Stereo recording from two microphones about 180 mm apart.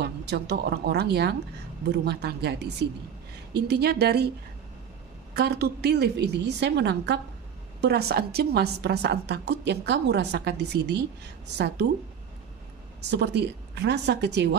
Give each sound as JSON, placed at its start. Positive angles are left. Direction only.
{"t": 0.0, "sound": "a woman's voice", "side_deg": -65}
{"t": 5.3, "sound": "a woman's voice", "side_deg": -65}
{"t": 13.1, "sound": "a woman's voice", "side_deg": -70}